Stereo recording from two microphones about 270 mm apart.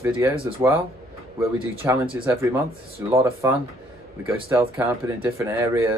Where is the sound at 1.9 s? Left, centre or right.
Centre.